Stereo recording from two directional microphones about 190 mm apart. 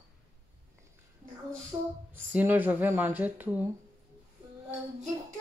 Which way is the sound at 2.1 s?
10° right (ahead or behind).